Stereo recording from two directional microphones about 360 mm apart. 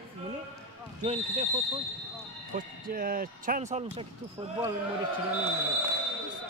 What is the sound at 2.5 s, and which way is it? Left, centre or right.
Speech, right.